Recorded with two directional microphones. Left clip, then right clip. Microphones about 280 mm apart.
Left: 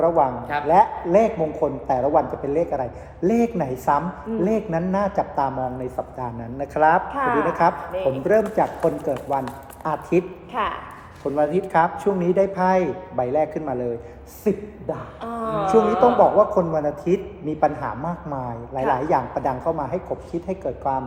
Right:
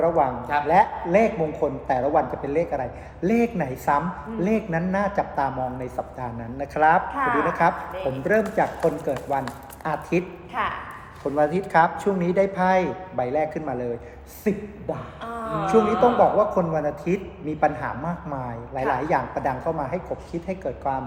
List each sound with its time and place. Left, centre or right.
0.0 s a man's voice: centre
7.1 s speech: left
8.2 s a man's voice: centre
10.5 s a sound: left
11.2 s a man's voice: centre
15.6 s a man's voice: centre